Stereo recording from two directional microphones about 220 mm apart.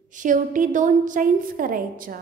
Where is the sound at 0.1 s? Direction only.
35° right (ahead or behind).